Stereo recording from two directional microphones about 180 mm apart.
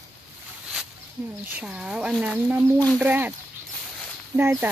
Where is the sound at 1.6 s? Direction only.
5° right (ahead or behind).